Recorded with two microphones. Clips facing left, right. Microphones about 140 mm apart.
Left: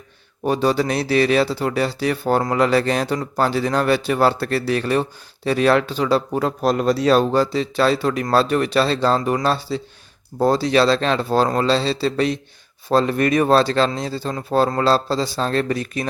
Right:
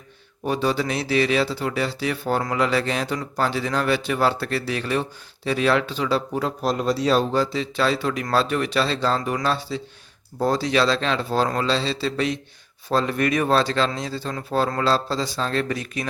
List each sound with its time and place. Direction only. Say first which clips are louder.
0.4 s speech: left 4 dB; 40° left (ahead or behind); by 7.4 s 55° left (ahead or behind)
7.5 s speech: left 4 dB; 40° left (ahead or behind)